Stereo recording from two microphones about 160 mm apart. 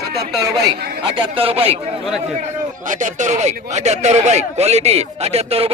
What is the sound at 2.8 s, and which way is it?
Speech, 50° right (ahead or behind).